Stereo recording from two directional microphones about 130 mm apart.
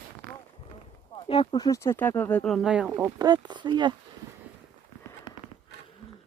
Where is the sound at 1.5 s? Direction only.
30° left (ahead or behind); by 2.7 s centre (ahead or behind).